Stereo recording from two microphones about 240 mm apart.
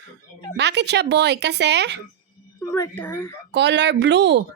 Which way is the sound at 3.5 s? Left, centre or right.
Right.